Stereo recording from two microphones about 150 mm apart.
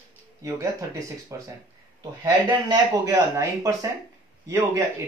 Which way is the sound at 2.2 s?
20° right (ahead or behind).